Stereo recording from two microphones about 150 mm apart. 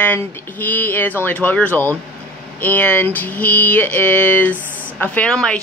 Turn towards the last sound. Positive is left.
turn(degrees=5)  # may be behind; listen again after turning